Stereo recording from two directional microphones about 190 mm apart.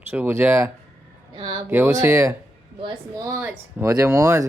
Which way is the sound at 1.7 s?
15° right (ahead or behind).